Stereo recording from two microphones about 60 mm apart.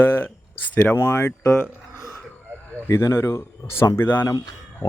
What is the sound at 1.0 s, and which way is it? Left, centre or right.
Speech, left.